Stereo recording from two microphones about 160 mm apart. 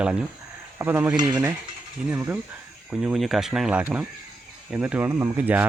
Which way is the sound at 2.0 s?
10° right (ahead or behind).